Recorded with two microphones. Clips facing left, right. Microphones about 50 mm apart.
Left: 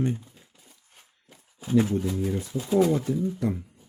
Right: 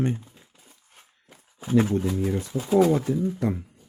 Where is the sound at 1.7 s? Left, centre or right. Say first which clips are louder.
Right 1 dB; right.